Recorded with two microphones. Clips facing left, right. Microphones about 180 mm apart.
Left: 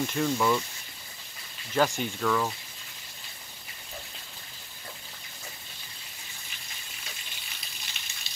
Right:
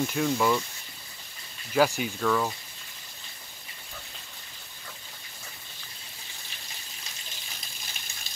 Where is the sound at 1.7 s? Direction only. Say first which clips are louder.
Right 2 dB; 5° right (ahead or behind).